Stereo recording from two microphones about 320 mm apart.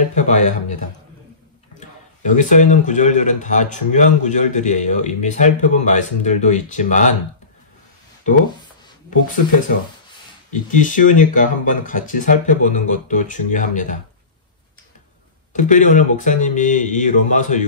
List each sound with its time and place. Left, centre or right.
0.0 s a sound: left
2.2 s speech: left
10.5 s speech: left
15.5 s speech: left